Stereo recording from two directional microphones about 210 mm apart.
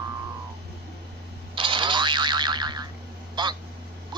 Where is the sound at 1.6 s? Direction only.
25° right (ahead or behind).